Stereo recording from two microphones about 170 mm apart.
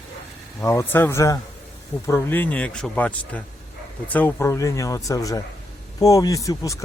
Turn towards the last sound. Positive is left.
turn(degrees=20)  # may be behind; listen again after turning